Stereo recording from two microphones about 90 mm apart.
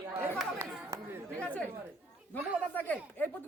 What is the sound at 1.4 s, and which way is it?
Chatter, 15° left (ahead or behind).